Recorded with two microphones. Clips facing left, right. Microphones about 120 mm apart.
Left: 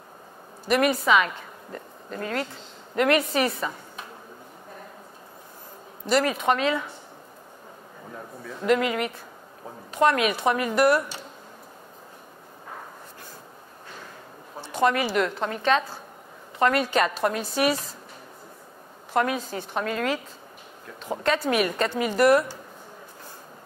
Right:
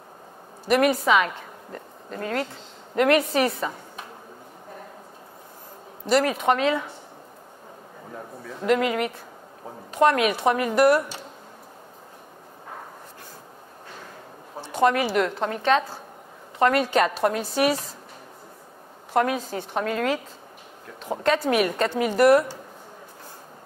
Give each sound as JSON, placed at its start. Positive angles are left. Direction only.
{"t": 0.7, "sound": "a woman's voice", "side_deg": -50}
{"t": 6.0, "sound": "a woman's voice", "side_deg": -45}
{"t": 8.1, "sound": "a woman's voice", "side_deg": -30}
{"t": 8.6, "sound": "a woman's voice", "side_deg": -45}
{"t": 14.5, "sound": "a sound", "side_deg": -25}
{"t": 14.8, "sound": "a woman's voice", "side_deg": -45}
{"t": 19.1, "sound": "a woman's voice", "side_deg": -40}
{"t": 21.2, "sound": "a woman's voice", "side_deg": -45}